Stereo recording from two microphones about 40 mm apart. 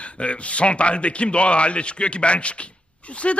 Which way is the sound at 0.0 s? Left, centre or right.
Left.